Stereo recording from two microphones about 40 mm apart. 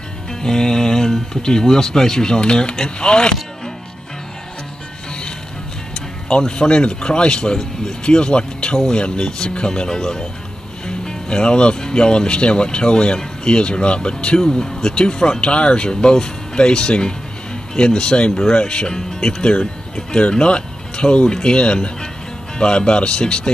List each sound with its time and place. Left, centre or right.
0.3 s speech: centre
6.2 s speech: left